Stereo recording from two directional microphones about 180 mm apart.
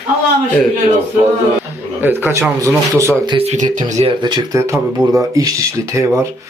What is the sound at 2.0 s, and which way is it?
Speech, 10° right (ahead or behind).